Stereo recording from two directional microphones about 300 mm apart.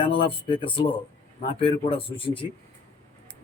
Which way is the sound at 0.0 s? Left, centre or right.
Centre.